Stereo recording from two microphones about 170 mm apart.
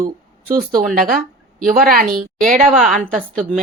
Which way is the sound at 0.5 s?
55° right (ahead or behind).